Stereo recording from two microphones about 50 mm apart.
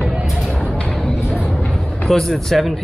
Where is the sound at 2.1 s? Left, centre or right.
Centre.